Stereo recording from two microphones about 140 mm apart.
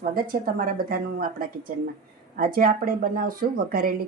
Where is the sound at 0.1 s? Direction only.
90° right.